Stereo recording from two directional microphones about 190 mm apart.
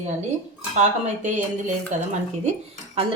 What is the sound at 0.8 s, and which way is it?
Speech, 40° right (ahead or behind).